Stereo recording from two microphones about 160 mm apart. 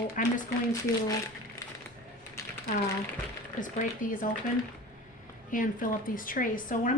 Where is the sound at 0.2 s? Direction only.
55° left (ahead or behind).